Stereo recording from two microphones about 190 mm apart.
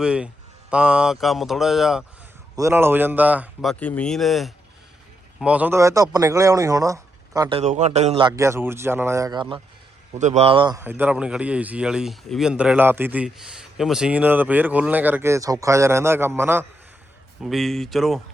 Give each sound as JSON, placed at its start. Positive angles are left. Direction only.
{"t": 0.0, "sound": "speech", "side_deg": -5}
{"t": 2.6, "sound": "speech", "side_deg": -15}
{"t": 7.5, "sound": "speech", "side_deg": -35}
{"t": 8.3, "sound": "speech", "side_deg": -15}
{"t": 10.2, "sound": "speech", "side_deg": -35}
{"t": 10.8, "sound": "speech", "side_deg": -10}
{"t": 17.4, "sound": "speech", "side_deg": 0}